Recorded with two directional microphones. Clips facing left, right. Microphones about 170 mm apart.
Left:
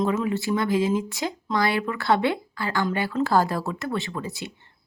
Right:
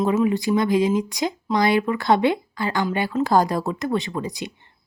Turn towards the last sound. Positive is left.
turn(degrees=-15)  # may be behind; listen again after turning